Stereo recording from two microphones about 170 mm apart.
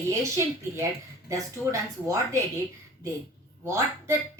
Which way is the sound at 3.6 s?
15° right (ahead or behind).